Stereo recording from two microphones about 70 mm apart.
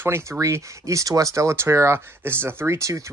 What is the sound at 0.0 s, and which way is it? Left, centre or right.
Speech, right.